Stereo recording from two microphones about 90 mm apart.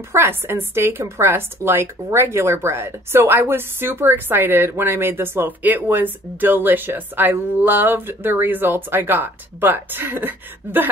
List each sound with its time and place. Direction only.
0.1 s a woman's voice: 25° right (ahead or behind)